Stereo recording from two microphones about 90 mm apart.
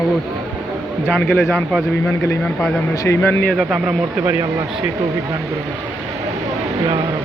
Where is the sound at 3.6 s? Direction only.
10° right (ahead or behind).